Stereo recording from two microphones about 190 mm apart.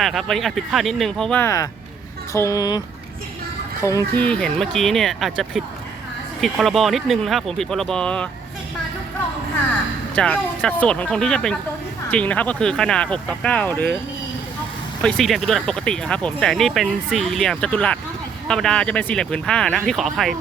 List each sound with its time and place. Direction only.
0.0 s speech: centre (ahead or behind); by 2.8 s 20° left (ahead or behind)
4.1 s speech: 5° left (ahead or behind)
10.2 s speech: 5° left (ahead or behind)
15.0 s speech: centre (ahead or behind)